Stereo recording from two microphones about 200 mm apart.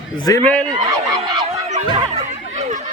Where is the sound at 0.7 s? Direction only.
20° right (ahead or behind).